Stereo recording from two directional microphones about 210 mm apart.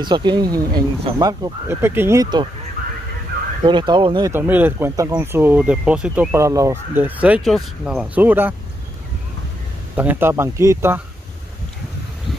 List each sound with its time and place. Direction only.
0.0 s speech: 20° right (ahead or behind)
3.6 s speech: 20° right (ahead or behind)
4.3 s speech: 10° right (ahead or behind)
9.9 s speech: 10° right (ahead or behind)